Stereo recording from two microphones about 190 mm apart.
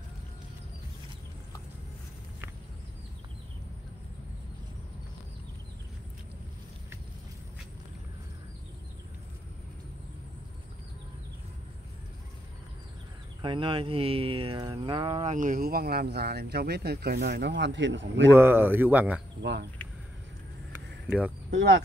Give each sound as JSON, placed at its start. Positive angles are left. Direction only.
{"t": 13.4, "sound": "speech", "side_deg": -25}
{"t": 15.3, "sound": "speech", "side_deg": -45}
{"t": 18.3, "sound": "speech", "side_deg": -10}
{"t": 19.4, "sound": "speech", "side_deg": -65}
{"t": 21.5, "sound": "speech", "side_deg": -65}